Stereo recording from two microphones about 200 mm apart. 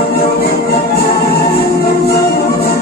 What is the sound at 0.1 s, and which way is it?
Music, 50° left (ahead or behind).